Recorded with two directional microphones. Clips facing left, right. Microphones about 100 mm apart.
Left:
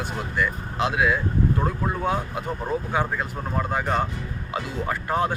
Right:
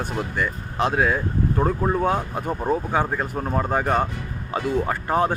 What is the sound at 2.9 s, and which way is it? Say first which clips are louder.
Speech: right 2 dB; 35° right (ahead or behind).